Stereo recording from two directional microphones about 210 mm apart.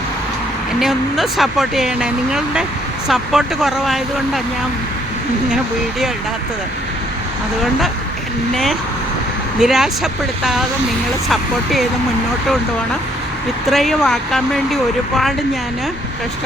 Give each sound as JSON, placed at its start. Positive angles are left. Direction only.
{"t": 0.8, "sound": "speech", "side_deg": 0}
{"t": 9.6, "sound": "speech", "side_deg": 0}
{"t": 13.7, "sound": "speech", "side_deg": 0}